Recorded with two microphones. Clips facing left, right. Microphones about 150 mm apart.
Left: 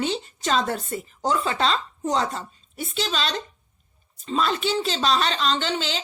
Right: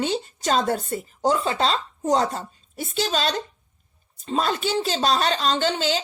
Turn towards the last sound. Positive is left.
turn(degrees=-40)  # may be behind; listen again after turning